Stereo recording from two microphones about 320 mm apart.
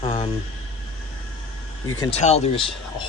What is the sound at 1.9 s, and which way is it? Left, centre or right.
Speech, centre.